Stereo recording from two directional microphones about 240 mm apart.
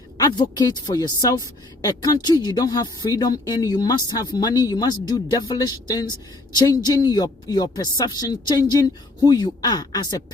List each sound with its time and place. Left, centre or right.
0.2 s speech: centre